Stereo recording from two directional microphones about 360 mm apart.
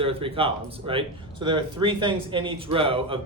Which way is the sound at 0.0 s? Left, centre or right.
Centre.